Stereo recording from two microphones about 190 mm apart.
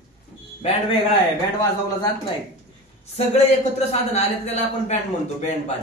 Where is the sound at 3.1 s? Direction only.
35° left (ahead or behind).